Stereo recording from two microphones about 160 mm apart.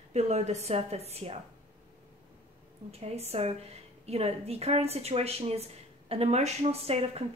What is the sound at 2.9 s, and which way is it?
Speech, 40° right (ahead or behind).